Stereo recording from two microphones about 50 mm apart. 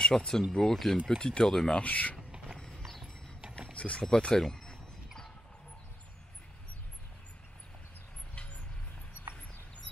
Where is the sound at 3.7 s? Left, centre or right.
Left.